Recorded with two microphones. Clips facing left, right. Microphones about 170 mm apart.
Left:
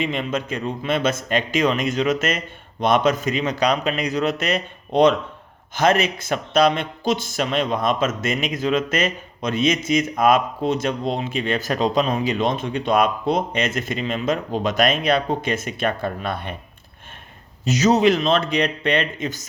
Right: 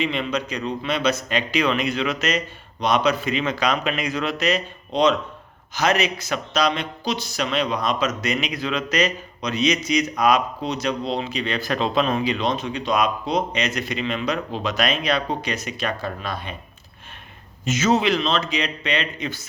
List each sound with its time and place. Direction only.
0.0 s a man's voice: 45° left (ahead or behind)
17.7 s a man's voice: 40° left (ahead or behind)